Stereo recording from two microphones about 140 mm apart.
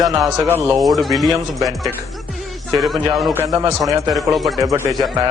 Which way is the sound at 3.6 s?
30° right (ahead or behind).